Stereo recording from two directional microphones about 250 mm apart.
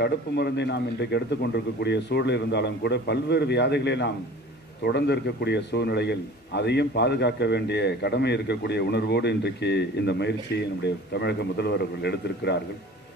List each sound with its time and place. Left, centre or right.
0.0 s a man's voice: left